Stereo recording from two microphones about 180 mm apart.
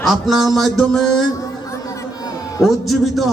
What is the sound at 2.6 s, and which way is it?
Speech, centre (ahead or behind).